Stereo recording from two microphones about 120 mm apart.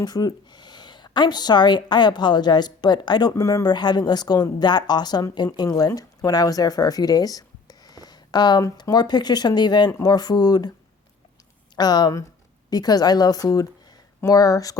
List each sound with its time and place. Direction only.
0.0 s a woman's voice: 35° left (ahead or behind)
11.8 s a woman's voice: 35° left (ahead or behind)